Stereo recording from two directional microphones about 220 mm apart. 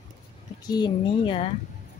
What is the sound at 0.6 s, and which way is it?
Speech, 20° left (ahead or behind).